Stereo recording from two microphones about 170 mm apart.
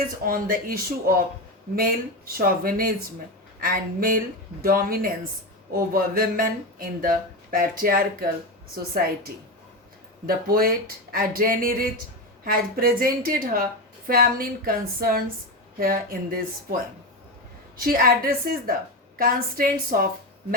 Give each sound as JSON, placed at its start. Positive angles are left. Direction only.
{"t": 0.3, "sound": "speech", "side_deg": -55}
{"t": 17.7, "sound": "speech", "side_deg": -60}